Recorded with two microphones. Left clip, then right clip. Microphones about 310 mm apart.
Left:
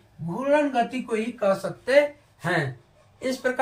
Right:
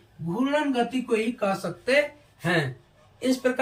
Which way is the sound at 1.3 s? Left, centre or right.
Centre.